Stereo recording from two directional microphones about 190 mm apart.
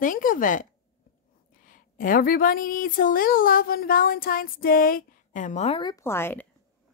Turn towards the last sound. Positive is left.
turn(degrees=10)  # may be behind; listen again after turning